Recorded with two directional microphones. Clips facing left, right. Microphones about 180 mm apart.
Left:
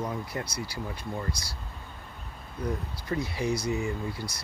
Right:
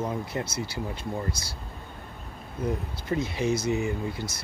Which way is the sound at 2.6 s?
20° right (ahead or behind).